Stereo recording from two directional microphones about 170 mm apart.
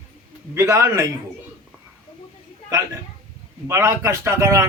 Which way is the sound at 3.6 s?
15° right (ahead or behind).